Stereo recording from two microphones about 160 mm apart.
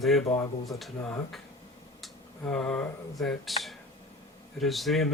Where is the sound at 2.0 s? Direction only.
5° left (ahead or behind).